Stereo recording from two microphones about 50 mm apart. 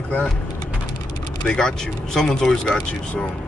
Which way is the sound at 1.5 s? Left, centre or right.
Centre.